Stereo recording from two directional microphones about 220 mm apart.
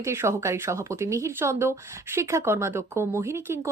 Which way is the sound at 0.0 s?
10° right (ahead or behind).